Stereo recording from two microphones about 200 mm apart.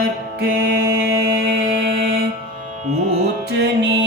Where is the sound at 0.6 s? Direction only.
55° right (ahead or behind).